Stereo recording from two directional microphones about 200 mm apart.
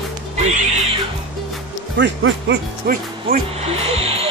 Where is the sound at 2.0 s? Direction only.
65° right (ahead or behind).